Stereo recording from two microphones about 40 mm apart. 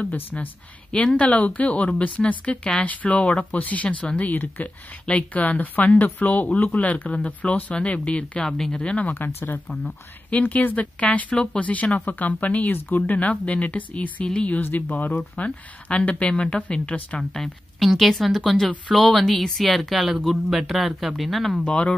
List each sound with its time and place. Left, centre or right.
0.0 s speech: left
3.2 s speech: left
3.5 s speech: left
8.4 s speech: centre
8.7 s speech: left
9.0 s speech: left
10.3 s speech: left
14.6 s speech: left
15.3 s speech: left
17.2 s speech: centre
21.6 s speech: left